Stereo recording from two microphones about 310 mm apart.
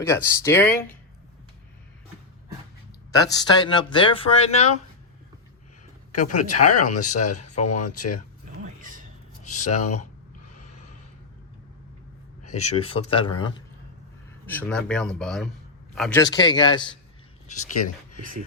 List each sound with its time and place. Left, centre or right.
0.0 s speech: centre
3.1 s speech: centre
6.1 s speech: left
8.8 s a sound: right
9.4 s a sound: left
9.6 s speech: left
12.7 s speech: centre
14.4 s speech: centre